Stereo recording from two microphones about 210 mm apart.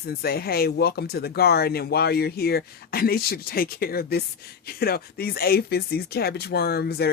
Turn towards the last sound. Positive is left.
turn(degrees=50)  # may be behind; listen again after turning